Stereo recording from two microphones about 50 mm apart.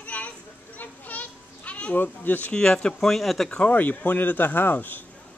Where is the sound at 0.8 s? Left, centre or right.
Left.